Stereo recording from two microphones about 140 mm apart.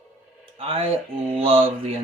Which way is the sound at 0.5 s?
45° right (ahead or behind).